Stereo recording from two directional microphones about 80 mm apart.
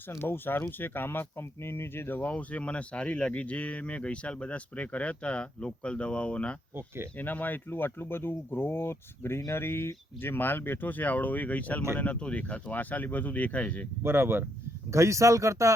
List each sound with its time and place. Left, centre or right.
0.1 s speech: left; by 6.6 s centre
6.7 s speech: right
7.2 s speech: left
14.0 s speech: right